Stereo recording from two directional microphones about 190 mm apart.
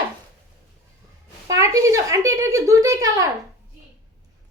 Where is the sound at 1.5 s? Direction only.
15° right (ahead or behind).